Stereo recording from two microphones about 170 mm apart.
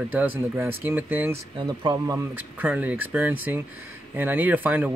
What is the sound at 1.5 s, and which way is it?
Speech, 30° right (ahead or behind).